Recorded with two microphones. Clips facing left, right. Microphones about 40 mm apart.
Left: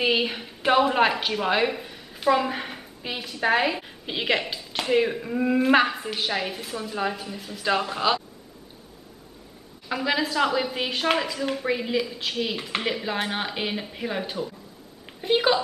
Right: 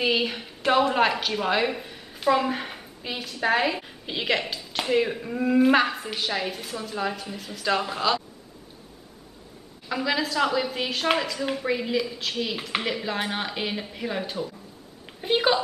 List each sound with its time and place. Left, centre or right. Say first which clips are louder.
0.0 s a woman's voice: left 1 dB; centre
9.8 s a woman's voice: left 1 dB; centre